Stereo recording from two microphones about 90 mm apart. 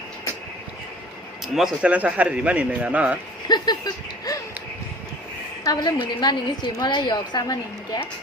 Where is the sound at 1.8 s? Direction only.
15° right (ahead or behind).